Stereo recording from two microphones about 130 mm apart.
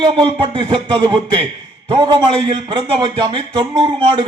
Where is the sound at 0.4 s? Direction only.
35° right (ahead or behind).